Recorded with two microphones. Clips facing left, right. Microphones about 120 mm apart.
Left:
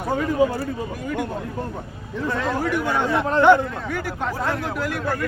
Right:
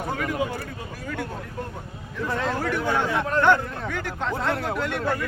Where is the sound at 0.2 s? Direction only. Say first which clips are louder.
Left 7 dB; 30° left (ahead or behind).